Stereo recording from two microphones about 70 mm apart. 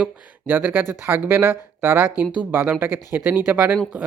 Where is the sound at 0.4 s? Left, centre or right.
Right.